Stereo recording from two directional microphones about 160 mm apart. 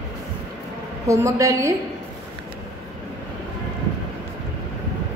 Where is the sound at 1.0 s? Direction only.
20° right (ahead or behind).